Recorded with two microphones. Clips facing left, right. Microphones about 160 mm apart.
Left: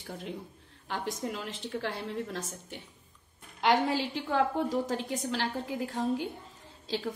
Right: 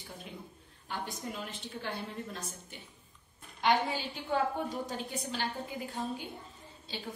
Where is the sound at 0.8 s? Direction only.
90° left.